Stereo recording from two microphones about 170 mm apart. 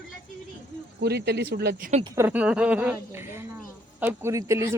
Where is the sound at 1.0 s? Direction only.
70° right (ahead or behind).